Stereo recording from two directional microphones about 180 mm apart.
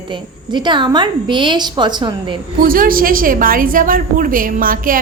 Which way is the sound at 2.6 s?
50° right (ahead or behind).